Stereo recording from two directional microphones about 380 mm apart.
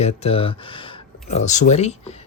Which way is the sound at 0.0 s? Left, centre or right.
Centre.